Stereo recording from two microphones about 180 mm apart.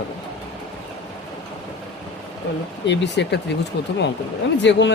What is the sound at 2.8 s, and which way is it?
Speech, 75° left (ahead or behind).